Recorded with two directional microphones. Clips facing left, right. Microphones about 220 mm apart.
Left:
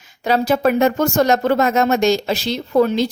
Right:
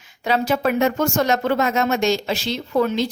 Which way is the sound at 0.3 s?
40° left (ahead or behind).